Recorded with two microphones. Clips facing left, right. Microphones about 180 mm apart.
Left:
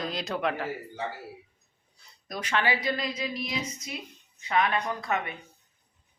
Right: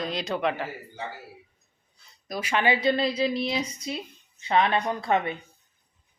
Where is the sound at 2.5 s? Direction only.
20° right (ahead or behind).